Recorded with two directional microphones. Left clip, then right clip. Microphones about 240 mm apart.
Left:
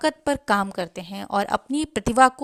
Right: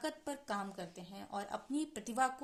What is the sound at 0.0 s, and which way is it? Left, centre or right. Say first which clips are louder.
A woman's voice: left 19 dB; left.